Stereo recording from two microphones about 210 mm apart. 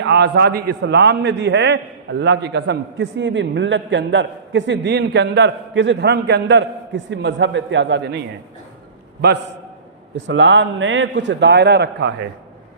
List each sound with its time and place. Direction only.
0.0 s a man's voice: 55° right (ahead or behind)
10.2 s a man's voice: 60° right (ahead or behind)